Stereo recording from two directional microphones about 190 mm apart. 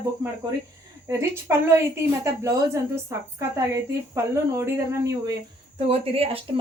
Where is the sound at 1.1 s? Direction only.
15° right (ahead or behind).